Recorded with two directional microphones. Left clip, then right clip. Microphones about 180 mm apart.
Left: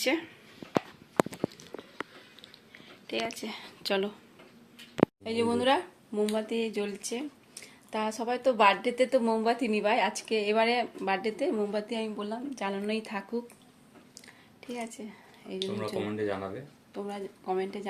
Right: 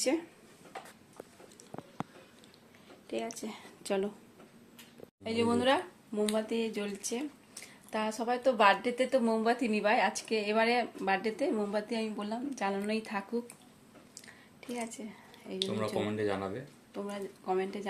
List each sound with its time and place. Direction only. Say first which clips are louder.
0.0 s speech: left 3 dB; 5° right (ahead or behind)
3.1 s speech: left 4 dB; 5° right (ahead or behind)
5.2 s a woman's voice: left 2 dB; 10° left (ahead or behind)
14.2 s a sound: left 1 dB; 5° left (ahead or behind)
16.0 s speech: left 1 dB; 30° right (ahead or behind)
16.9 s speech: left 2 dB; 5° left (ahead or behind)